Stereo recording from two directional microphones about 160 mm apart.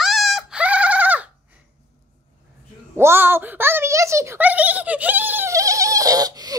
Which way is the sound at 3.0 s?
15° right (ahead or behind).